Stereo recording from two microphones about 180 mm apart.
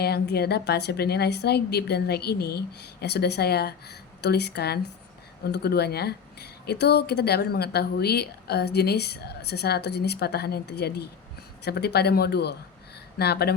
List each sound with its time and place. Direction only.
0.0 s speech: 60° left (ahead or behind)